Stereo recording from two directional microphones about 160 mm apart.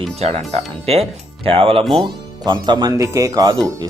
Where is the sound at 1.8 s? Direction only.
Centre (ahead or behind).